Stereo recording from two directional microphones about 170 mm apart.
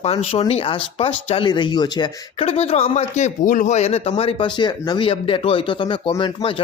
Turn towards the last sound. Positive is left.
turn(degrees=30)  # may be behind; listen again after turning